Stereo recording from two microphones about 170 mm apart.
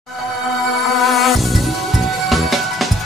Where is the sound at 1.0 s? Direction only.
Centre (ahead or behind).